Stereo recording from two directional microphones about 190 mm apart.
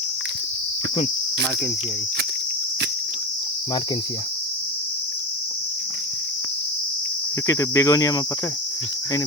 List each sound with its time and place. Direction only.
7.4 s cricket: 15° left (ahead or behind)